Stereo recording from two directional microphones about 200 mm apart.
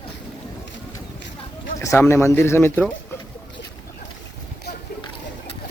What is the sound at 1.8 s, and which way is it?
Speech, 15° left (ahead or behind).